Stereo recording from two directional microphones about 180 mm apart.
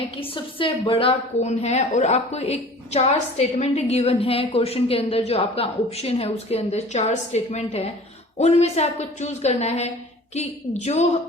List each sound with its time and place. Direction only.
0.2 s a woman's voice: 30° left (ahead or behind)